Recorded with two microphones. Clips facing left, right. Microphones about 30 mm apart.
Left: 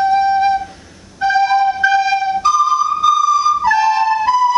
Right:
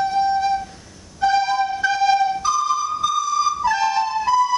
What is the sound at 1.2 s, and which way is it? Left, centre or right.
Flute, centre.